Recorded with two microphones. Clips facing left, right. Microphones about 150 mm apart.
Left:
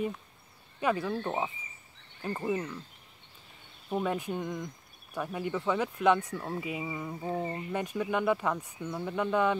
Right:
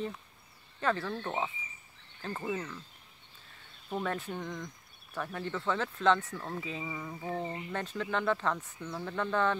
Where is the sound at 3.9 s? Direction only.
10° left (ahead or behind).